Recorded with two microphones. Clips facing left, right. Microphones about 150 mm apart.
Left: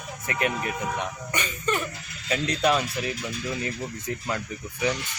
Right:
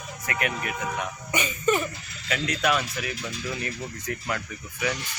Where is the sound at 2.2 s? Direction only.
30° left (ahead or behind).